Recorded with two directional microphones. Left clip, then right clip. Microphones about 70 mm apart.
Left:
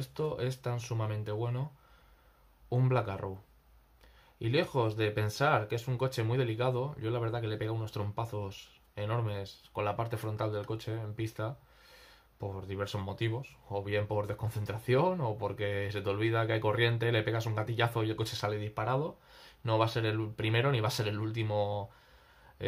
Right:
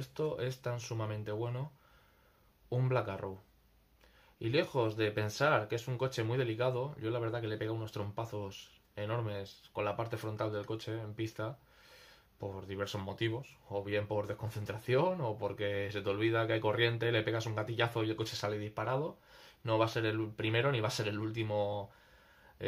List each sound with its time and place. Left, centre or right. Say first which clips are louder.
0.0 s speech: left 1 dB; left
2.7 s speech: left 2 dB; left
4.4 s speech: left 2 dB; left